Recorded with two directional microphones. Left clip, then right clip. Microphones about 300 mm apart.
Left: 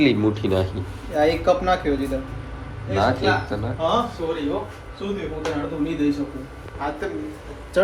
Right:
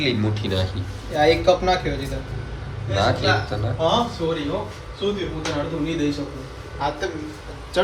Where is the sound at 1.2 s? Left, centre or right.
Centre.